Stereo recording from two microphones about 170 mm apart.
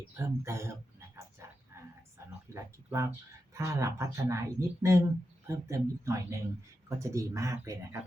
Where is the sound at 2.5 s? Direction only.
15° right (ahead or behind).